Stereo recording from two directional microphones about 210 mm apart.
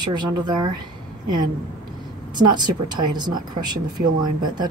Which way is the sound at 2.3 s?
20° right (ahead or behind).